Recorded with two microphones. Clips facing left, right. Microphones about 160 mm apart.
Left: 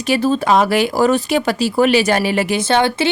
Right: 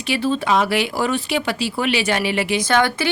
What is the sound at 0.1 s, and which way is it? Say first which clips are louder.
Speech: left 4 dB; 40° left (ahead or behind).